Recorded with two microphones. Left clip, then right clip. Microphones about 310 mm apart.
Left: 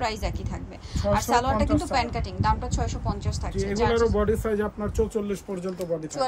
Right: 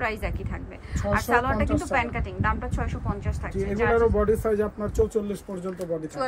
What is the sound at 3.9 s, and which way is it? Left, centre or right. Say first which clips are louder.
Speech: right 4 dB; centre.